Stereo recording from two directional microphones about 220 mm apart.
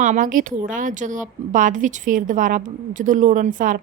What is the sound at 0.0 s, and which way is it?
A woman's voice, 35° right (ahead or behind).